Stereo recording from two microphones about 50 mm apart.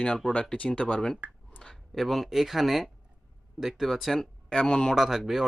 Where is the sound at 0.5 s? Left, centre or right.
Left.